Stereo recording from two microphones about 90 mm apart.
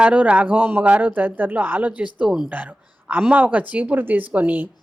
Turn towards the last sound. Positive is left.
turn(degrees=-20)  # may be behind; listen again after turning